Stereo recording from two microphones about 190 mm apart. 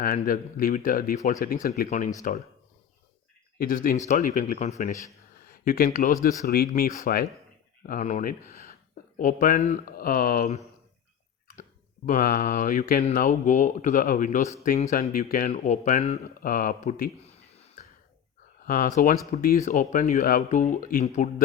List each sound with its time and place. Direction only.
0.0 s speech: 50° left (ahead or behind)
3.6 s speech: 50° left (ahead or behind)
12.0 s speech: 45° left (ahead or behind)
16.4 s a sound: 45° left (ahead or behind)
18.6 s speech: 50° left (ahead or behind)